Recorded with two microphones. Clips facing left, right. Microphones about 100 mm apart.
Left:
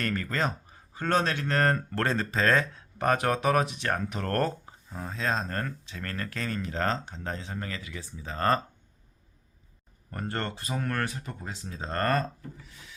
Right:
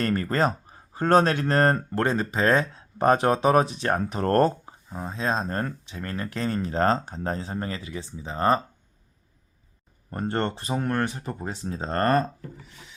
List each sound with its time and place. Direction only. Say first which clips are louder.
0.0 s speech: right 6 dB; 40° right (ahead or behind); by 8.6 s 15° right (ahead or behind)
10.1 s speech: right 6 dB; 25° right (ahead or behind)
11.3 s speech: right 7 dB; 35° right (ahead or behind)